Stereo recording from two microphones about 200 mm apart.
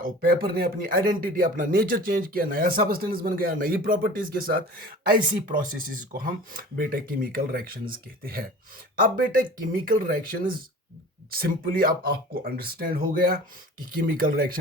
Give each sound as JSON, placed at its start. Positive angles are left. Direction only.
{"t": 0.0, "sound": "speech", "side_deg": -45}